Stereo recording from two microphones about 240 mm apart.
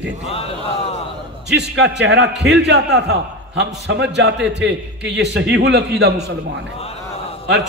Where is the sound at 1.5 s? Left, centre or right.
Right.